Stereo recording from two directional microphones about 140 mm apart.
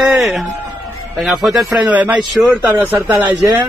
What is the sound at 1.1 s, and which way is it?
A man's voice, centre (ahead or behind).